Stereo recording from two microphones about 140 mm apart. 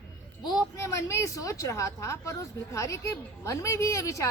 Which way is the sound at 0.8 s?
20° left (ahead or behind).